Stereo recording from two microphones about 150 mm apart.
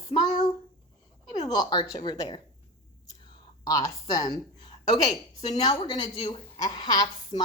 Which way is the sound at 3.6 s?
25° left (ahead or behind).